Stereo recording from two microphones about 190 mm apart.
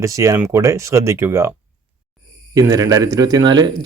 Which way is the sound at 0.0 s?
15° right (ahead or behind).